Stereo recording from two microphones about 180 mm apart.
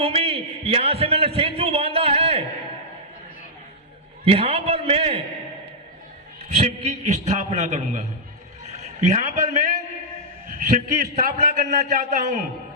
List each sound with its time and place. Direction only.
0.0 s a sound: 35° right (ahead or behind)
4.2 s a man's voice: 35° right (ahead or behind)
6.6 s a man's voice: 40° right (ahead or behind)